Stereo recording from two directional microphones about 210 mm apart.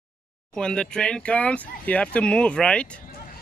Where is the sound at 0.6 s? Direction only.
5° left (ahead or behind).